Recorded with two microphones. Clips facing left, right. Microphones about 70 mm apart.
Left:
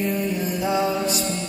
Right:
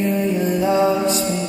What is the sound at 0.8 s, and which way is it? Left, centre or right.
Music, centre.